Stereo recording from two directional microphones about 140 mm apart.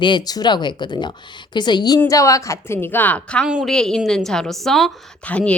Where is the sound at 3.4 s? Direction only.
5° right (ahead or behind).